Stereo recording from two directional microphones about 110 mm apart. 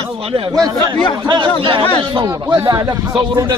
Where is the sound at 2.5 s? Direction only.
35° right (ahead or behind).